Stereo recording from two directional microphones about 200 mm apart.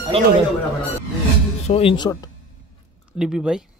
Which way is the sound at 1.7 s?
30° left (ahead or behind).